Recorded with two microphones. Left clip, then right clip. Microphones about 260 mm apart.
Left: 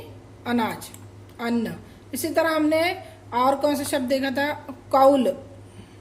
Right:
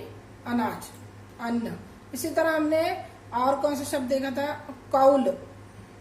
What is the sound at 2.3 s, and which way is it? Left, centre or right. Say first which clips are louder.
A woman's voice: left 3 dB; left.